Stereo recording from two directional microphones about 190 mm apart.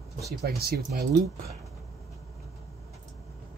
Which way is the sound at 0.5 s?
50° right (ahead or behind).